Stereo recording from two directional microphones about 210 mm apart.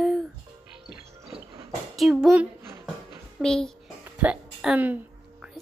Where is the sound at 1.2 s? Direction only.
25° right (ahead or behind).